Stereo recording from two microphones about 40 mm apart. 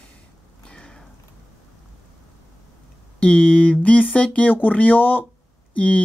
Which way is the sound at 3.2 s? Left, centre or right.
Left.